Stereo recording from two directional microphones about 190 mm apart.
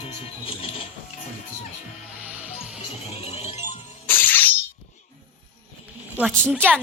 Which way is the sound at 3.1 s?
35° left (ahead or behind).